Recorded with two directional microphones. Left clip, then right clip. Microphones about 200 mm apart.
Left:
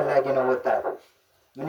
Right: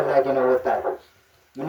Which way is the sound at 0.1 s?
50° left (ahead or behind).